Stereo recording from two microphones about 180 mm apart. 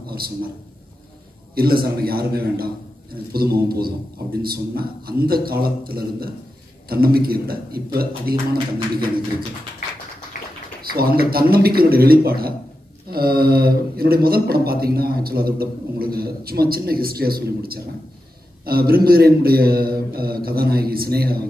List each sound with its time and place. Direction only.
1.5 s speech: 55° right (ahead or behind)
10.3 s a sound: 50° left (ahead or behind)
10.8 s speech: 55° right (ahead or behind)